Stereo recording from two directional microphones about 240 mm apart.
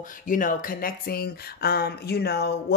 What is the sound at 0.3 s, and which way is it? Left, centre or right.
Speech, left.